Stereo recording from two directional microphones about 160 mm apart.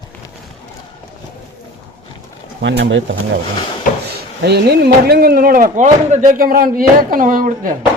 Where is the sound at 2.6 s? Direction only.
90° right.